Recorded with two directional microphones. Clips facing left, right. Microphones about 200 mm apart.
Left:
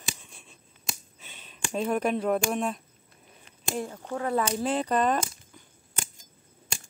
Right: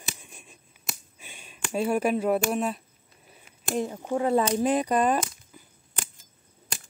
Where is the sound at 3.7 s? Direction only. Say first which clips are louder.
Right 6 dB; 20° right (ahead or behind).